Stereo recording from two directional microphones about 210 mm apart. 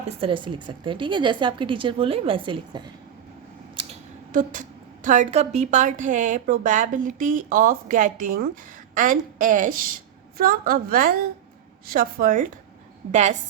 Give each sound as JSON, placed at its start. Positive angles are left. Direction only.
{"t": 0.2, "sound": "speech", "side_deg": -25}
{"t": 4.3, "sound": "a woman's voice", "side_deg": -40}